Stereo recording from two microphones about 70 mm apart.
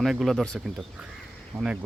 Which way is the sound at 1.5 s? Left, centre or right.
Right.